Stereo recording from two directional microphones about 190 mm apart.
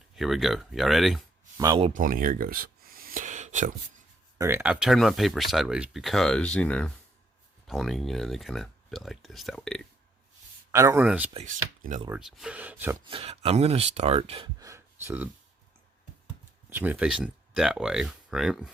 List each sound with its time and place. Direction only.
0.2 s speech: centre (ahead or behind)
1.5 s speech: 20° right (ahead or behind)
2.0 s a sound: 45° right (ahead or behind)
4.4 s speech: 10° right (ahead or behind); by 9.8 s 5° left (ahead or behind)
10.7 s speech: 15° right (ahead or behind)
11.3 s speech: 40° right (ahead or behind)
12.0 s speech: 5° right (ahead or behind)
13.1 s speech: 30° right (ahead or behind)
14.6 s speech: 15° right (ahead or behind)
16.6 s speech: 10° right (ahead or behind)